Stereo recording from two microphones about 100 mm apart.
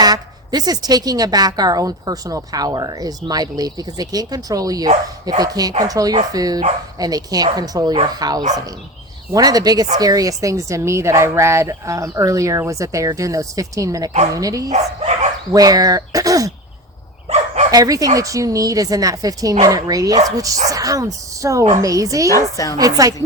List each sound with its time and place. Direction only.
0.0 s a woman's voice: 40° right (ahead or behind)
14.8 s speech: 90° right
15.5 s a woman's voice: 40° right (ahead or behind)
17.2 s dog: 90° right
17.7 s a woman's voice: 35° right (ahead or behind)
22.3 s a woman's voice: 35° left (ahead or behind)
22.8 s a woman's voice: 35° right (ahead or behind)